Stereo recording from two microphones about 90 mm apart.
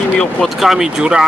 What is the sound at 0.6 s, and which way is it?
Speech, 5° right (ahead or behind).